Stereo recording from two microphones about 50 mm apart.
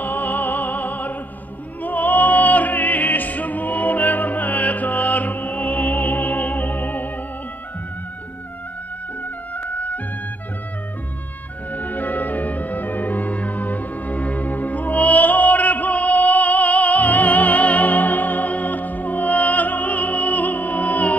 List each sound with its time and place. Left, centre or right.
0.0 s music: left
9.2 s music: left
11.7 s music: left